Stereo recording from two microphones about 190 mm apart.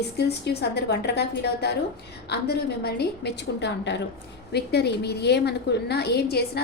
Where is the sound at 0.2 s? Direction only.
60° left (ahead or behind).